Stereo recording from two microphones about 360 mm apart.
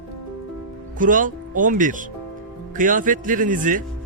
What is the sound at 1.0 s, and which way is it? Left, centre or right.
A man's voice, right.